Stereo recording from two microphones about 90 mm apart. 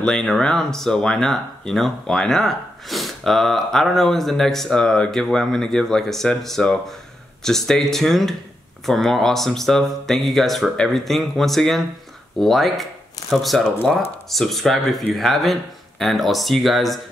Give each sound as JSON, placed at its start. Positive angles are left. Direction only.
{"t": 0.0, "sound": "speech", "side_deg": 5}